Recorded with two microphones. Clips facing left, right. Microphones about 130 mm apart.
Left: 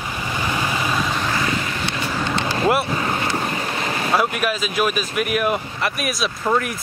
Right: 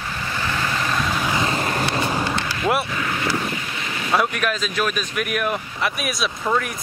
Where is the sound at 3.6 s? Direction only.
45° left (ahead or behind).